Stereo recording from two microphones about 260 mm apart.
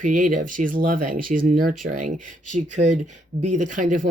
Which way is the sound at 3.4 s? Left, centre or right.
Right.